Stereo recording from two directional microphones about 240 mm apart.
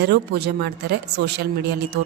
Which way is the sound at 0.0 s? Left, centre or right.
Right.